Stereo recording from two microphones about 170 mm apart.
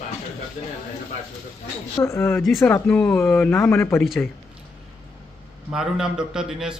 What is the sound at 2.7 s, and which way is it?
Speech, 10° left (ahead or behind).